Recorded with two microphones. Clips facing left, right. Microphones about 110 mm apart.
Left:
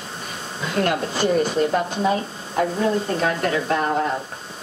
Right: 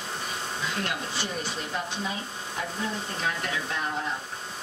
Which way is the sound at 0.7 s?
55° left (ahead or behind).